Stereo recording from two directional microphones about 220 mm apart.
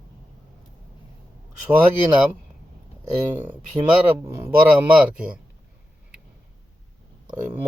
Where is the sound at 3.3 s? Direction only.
10° right (ahead or behind).